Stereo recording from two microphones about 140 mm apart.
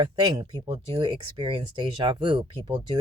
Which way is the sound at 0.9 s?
35° right (ahead or behind).